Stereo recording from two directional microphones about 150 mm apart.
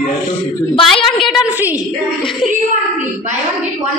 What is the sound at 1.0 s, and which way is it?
Speech, 35° left (ahead or behind).